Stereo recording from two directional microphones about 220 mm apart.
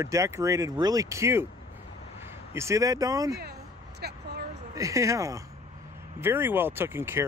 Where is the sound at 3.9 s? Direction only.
45° right (ahead or behind).